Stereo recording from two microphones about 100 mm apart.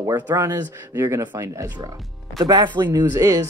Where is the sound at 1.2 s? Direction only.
45° right (ahead or behind).